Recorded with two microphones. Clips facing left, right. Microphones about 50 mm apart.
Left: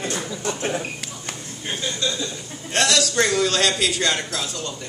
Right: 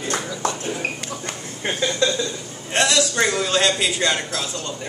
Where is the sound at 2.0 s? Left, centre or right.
Right.